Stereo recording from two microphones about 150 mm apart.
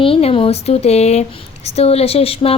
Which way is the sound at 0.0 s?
40° left (ahead or behind).